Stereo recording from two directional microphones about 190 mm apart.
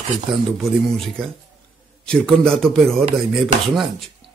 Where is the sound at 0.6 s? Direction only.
Centre (ahead or behind).